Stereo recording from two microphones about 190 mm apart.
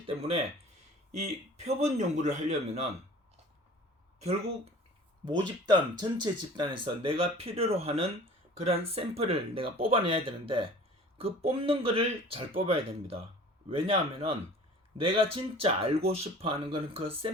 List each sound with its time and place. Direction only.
0.0 s a man's voice: 30° right (ahead or behind)
4.2 s a man's voice: 35° right (ahead or behind)
5.4 s a man's voice: 25° right (ahead or behind)